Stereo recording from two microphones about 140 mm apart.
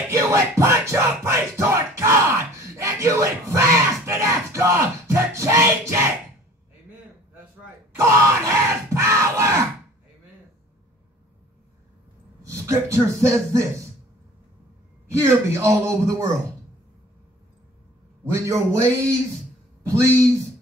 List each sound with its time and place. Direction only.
0.1 s music: 20° right (ahead or behind)
8.0 s crowd: 20° right (ahead or behind)
12.4 s a man's voice: 20° right (ahead or behind)
15.0 s a man's voice: 20° right (ahead or behind)
18.3 s a man's voice: 20° right (ahead or behind)